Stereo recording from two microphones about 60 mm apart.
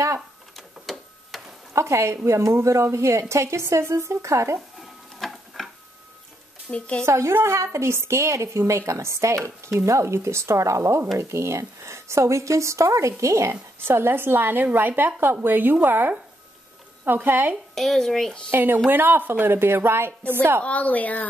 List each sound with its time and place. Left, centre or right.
0.6 s printer: centre
1.7 s a woman's voice: right
5.2 s tick-tock: centre
6.7 s speech: centre
7.1 s a woman's voice: right
13.8 s a woman's voice: right
17.7 s speech: centre
18.5 s a woman's voice: right
20.6 s a woman's voice: left